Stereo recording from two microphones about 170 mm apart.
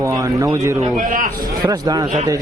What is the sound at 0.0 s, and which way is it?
Speech, 20° right (ahead or behind).